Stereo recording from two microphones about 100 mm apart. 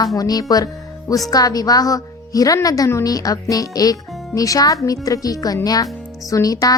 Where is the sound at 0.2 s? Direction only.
40° left (ahead or behind).